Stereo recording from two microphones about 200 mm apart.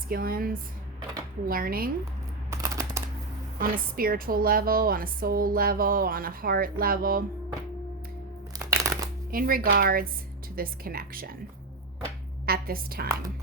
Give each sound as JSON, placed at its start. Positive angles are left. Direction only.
{"t": 0.1, "sound": "a woman's voice", "side_deg": -45}
{"t": 2.5, "sound": "a sound", "side_deg": -15}
{"t": 3.6, "sound": "a woman's voice", "side_deg": -45}
{"t": 8.5, "sound": "a sound", "side_deg": -15}
{"t": 9.3, "sound": "a woman's voice", "side_deg": -45}
{"t": 12.5, "sound": "a woman's voice", "side_deg": -45}